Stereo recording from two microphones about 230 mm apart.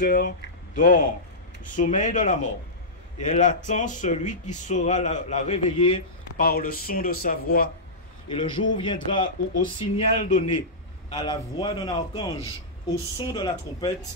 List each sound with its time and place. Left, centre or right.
0.0 s speech: left
6.3 s speech: left
8.3 s a man's voice: left